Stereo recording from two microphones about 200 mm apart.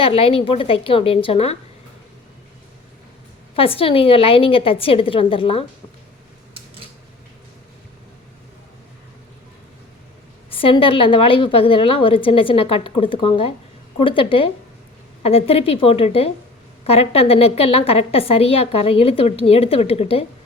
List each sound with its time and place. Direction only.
0.0 s a woman's voice: 30° left (ahead or behind)
3.5 s a woman's voice: 30° left (ahead or behind)
10.5 s a woman's voice: 25° left (ahead or behind)